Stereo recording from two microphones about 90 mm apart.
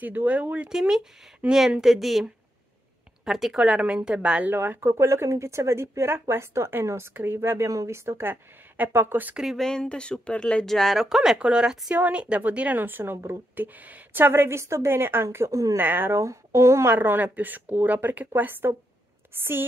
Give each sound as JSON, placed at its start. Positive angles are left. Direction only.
{"t": 0.0, "sound": "a woman's voice", "side_deg": -20}
{"t": 3.3, "sound": "speech", "side_deg": -5}
{"t": 4.7, "sound": "speech", "side_deg": -30}
{"t": 9.4, "sound": "speech", "side_deg": -5}
{"t": 9.7, "sound": "speech", "side_deg": 10}
{"t": 15.8, "sound": "speech", "side_deg": -25}